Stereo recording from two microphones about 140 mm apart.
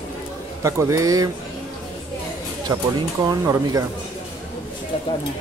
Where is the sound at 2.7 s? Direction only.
25° right (ahead or behind).